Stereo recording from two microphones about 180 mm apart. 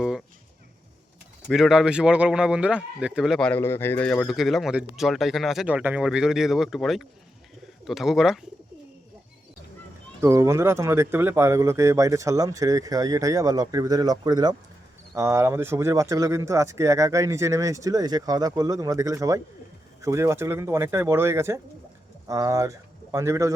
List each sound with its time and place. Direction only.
1.5 s speech: centre (ahead or behind)
10.2 s speech: 15° right (ahead or behind)